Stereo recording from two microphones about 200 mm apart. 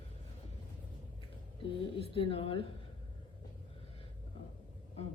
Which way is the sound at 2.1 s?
25° left (ahead or behind).